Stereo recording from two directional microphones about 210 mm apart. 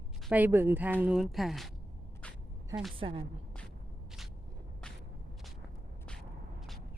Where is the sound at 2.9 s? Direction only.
25° right (ahead or behind).